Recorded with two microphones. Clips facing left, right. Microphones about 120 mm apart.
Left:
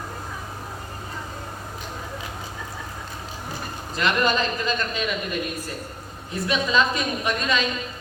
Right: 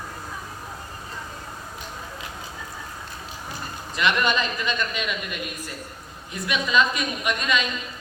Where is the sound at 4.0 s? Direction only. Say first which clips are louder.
Left 1 dB; 40° left (ahead or behind).